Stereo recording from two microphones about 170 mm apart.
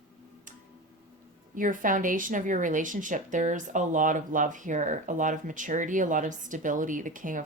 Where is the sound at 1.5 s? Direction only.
50° right (ahead or behind).